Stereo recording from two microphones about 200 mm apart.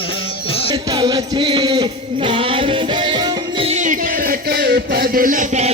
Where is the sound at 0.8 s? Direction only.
20° right (ahead or behind).